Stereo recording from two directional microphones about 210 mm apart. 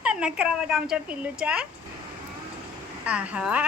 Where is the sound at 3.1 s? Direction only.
5° right (ahead or behind).